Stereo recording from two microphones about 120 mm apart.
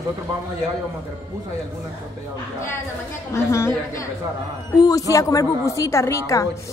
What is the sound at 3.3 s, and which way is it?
A woman's voice, 20° left (ahead or behind).